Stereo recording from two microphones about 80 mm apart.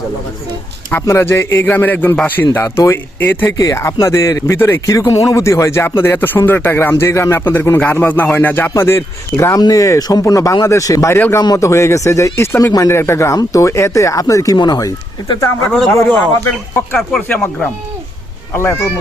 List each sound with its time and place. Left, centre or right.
1.0 s speech: left
2.6 s speech: left
3.2 s speech: left
3.6 s speech: left
4.9 s speech: left
8.7 s speech: left
9.6 s speech: left
14.5 s speech: left
16.0 s speech: left